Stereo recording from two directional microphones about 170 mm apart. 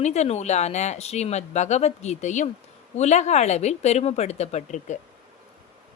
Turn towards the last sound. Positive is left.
turn(degrees=45)  # may be behind; listen again after turning